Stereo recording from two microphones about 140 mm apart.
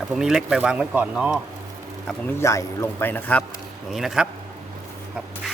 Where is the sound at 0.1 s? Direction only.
5° right (ahead or behind).